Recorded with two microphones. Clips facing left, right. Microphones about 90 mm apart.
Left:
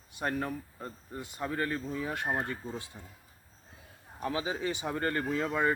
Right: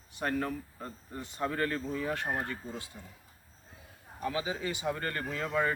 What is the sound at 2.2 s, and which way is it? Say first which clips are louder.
Speech: left 2 dB; 25° left (ahead or behind).